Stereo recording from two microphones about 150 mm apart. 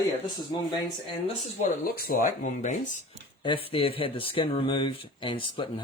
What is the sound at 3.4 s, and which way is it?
Speech, 35° left (ahead or behind).